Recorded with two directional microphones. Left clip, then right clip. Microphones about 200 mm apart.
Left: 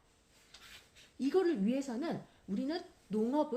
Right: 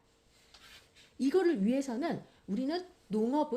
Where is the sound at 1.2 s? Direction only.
35° right (ahead or behind).